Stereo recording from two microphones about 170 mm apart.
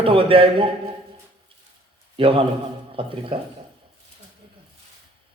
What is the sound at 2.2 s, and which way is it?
Speech, 30° right (ahead or behind).